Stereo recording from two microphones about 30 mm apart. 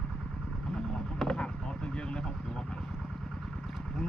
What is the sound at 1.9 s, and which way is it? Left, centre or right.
Vehicle, left.